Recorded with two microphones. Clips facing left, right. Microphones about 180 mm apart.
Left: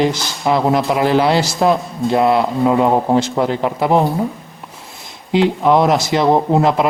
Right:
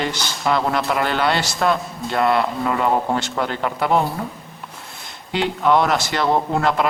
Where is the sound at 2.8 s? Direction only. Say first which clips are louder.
Left 5 dB; 35° left (ahead or behind).